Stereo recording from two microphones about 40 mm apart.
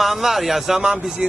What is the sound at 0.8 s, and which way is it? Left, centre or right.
Speech, centre.